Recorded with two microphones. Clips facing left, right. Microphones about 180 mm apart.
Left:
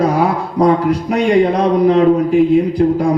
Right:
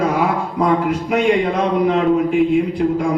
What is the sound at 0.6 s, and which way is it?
A man's voice, 35° left (ahead or behind).